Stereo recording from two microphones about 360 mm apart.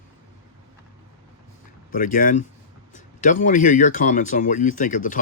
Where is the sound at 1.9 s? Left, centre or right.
Left.